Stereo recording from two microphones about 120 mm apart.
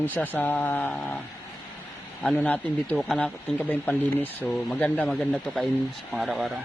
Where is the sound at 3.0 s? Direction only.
Centre (ahead or behind).